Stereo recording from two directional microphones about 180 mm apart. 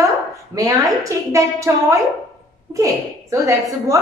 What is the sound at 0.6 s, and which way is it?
A woman's voice, 20° right (ahead or behind).